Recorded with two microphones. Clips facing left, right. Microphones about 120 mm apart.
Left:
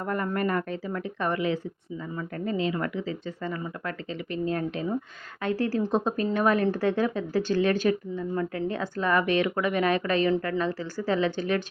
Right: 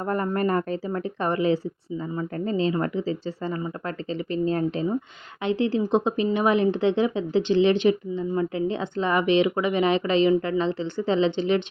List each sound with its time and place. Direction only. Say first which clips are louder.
0.0 s speech: right 3 dB; 35° right (ahead or behind)
5.4 s speech: right 3 dB; 20° right (ahead or behind)